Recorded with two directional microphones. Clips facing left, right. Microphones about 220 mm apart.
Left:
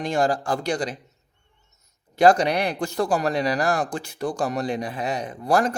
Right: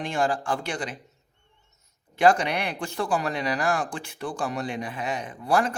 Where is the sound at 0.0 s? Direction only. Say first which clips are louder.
Left 4 dB; 40° left (ahead or behind).